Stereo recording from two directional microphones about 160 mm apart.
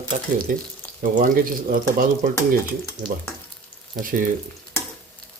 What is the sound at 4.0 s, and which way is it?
Speech, 55° right (ahead or behind).